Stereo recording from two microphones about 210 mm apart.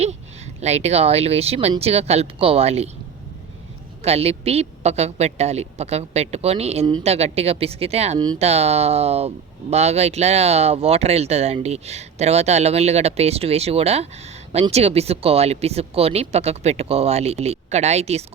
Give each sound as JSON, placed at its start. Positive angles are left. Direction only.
{"t": 0.0, "sound": "a woman's voice", "side_deg": -30}
{"t": 4.0, "sound": "a woman's voice", "side_deg": -30}